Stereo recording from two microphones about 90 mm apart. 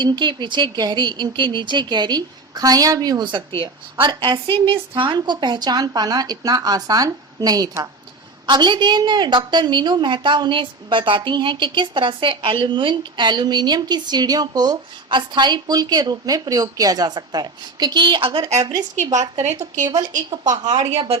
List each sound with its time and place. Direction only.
0.0 s a woman's voice: 55° right (ahead or behind)
3.3 s speech: 70° right (ahead or behind)
4.1 s a woman's voice: 60° right (ahead or behind)
4.5 s a woman's voice: 70° right (ahead or behind); by 7.9 s 45° right (ahead or behind)
8.4 s a woman's voice: 55° right (ahead or behind); by 18.5 s 80° right
18.6 s a woman's voice: 45° right (ahead or behind)
20.9 s speech: 90° right